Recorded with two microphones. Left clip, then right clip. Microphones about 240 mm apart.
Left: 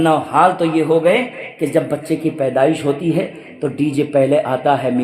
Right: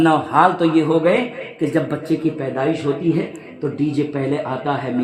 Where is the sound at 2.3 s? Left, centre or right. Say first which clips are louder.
Left 6 dB; left.